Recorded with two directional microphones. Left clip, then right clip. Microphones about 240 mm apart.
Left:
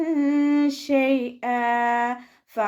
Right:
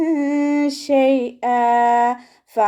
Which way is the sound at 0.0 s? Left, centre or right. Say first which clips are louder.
Right 3 dB; centre.